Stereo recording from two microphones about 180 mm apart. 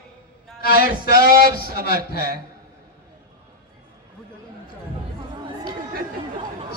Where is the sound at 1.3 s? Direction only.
55° right (ahead or behind).